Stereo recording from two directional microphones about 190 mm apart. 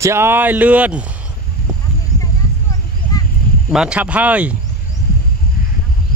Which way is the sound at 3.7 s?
5° right (ahead or behind).